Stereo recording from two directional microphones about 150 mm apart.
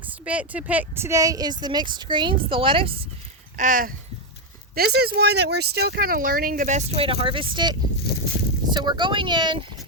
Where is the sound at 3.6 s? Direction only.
65° right (ahead or behind).